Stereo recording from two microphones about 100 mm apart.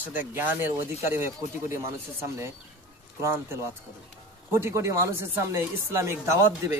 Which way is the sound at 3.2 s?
25° right (ahead or behind).